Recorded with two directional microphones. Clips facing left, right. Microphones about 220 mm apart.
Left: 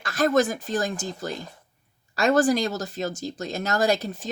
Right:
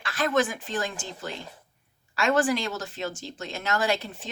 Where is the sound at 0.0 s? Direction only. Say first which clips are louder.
Left 4 dB; 40° left (ahead or behind).